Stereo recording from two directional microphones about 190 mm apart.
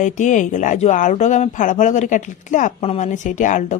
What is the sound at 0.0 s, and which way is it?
Speech, 40° left (ahead or behind).